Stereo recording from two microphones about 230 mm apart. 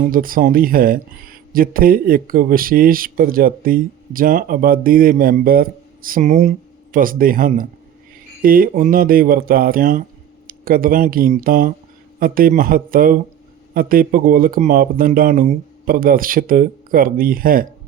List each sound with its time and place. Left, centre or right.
0.1 s speech: right